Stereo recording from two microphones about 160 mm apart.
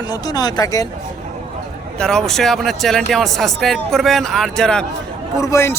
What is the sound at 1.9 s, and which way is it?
Speech, 5° left (ahead or behind).